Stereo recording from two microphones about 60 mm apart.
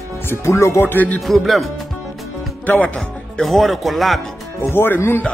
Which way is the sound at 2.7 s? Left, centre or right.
Left.